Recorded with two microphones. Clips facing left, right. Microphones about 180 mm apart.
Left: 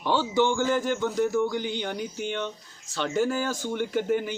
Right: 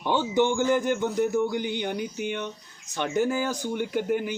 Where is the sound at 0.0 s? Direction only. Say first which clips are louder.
Even; 15° right (ahead or behind).